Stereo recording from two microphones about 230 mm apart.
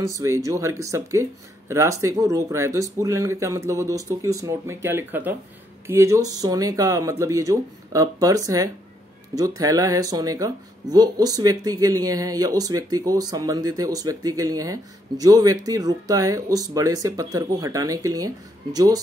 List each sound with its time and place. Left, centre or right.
0.2 s speech: centre